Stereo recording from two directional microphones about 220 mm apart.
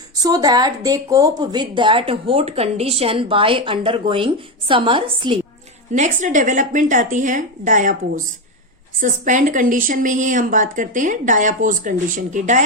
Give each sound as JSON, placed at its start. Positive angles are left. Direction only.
{"t": 0.2, "sound": "speech", "side_deg": -15}
{"t": 5.9, "sound": "speech", "side_deg": -35}
{"t": 9.0, "sound": "speech", "side_deg": -35}